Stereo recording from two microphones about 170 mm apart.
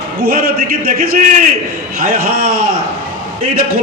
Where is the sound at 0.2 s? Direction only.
60° right (ahead or behind).